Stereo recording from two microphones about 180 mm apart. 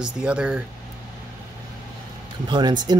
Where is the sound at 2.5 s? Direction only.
25° right (ahead or behind).